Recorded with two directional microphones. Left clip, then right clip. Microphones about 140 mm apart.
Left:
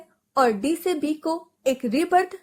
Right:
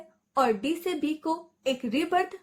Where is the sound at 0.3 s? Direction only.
40° left (ahead or behind).